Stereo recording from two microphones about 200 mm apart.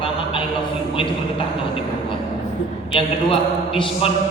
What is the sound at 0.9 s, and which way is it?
Speech, 25° left (ahead or behind).